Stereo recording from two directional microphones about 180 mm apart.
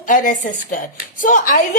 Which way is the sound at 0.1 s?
50° left (ahead or behind).